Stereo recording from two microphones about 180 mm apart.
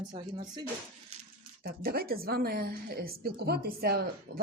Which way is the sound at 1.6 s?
55° right (ahead or behind).